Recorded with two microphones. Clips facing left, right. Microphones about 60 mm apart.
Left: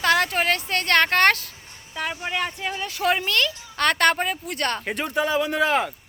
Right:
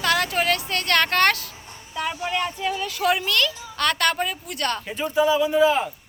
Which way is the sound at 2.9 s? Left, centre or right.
Left.